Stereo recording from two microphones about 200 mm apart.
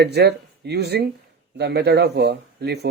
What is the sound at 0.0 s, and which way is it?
Speech, 55° right (ahead or behind).